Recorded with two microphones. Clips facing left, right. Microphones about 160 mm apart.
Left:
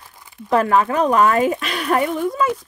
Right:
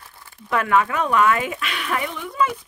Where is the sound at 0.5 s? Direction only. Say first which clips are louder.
Left 4 dB; 35° left (ahead or behind).